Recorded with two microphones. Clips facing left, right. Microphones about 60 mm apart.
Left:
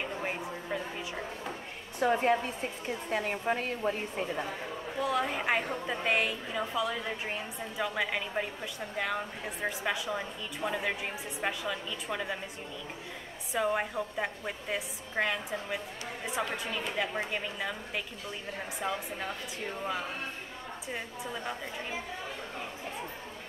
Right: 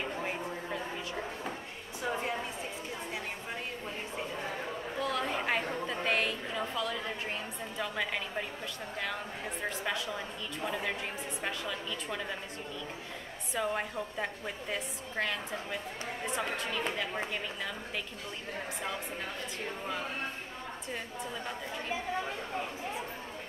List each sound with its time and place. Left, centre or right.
0.0 s a sound: centre
2.0 s a woman's voice: left
5.0 s a woman's voice: centre
13.5 s a woman's voice: centre